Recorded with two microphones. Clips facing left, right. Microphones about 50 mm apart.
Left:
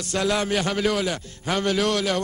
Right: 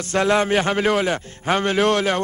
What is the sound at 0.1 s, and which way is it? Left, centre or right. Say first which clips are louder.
A man's voice: right 5 dB; right.